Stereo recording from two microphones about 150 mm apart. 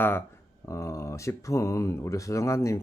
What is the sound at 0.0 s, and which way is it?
Speech, 15° left (ahead or behind).